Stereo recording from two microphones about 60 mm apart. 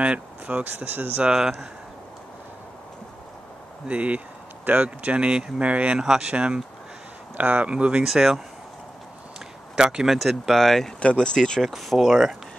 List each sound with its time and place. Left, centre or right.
0.0 s speech: right
1.2 s speech: centre
3.8 s speech: right
5.9 s speech: centre
8.1 s speech: centre
9.8 s speech: centre
11.0 s speech: centre
11.6 s speech: centre